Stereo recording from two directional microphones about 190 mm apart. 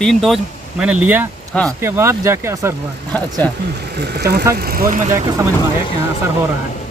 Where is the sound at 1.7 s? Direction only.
15° right (ahead or behind).